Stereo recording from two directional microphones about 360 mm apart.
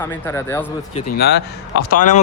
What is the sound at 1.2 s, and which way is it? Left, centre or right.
Speech, left.